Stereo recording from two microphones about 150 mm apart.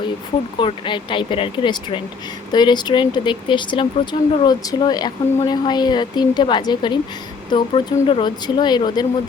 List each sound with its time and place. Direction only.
0.6 s speech: 35° left (ahead or behind)